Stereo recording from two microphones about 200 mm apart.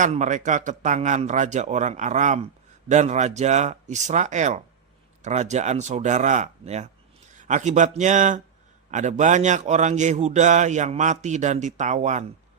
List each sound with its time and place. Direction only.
0.0 s a man's voice: 35° right (ahead or behind)